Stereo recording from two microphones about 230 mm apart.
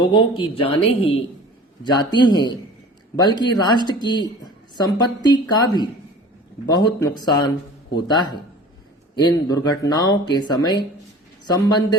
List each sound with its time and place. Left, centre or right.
0.0 s speech: left